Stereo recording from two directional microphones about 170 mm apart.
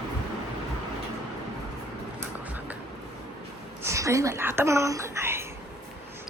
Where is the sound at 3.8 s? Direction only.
15° right (ahead or behind).